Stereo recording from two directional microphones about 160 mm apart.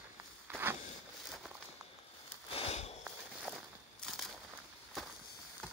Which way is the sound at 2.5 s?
40° left (ahead or behind).